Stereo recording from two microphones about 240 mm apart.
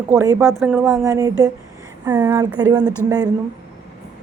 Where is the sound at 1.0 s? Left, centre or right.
Centre.